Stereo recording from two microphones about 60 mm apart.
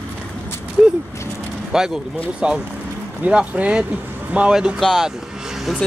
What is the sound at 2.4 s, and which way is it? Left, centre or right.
Speech, centre.